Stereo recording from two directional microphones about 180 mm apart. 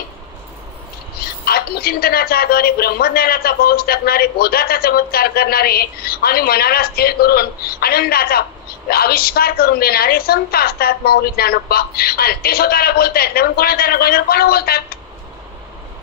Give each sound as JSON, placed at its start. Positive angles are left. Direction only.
{"t": 1.2, "sound": "a woman's voice", "side_deg": 60}